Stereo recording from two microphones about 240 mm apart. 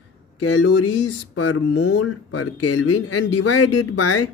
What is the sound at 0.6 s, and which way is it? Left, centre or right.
Speech, left.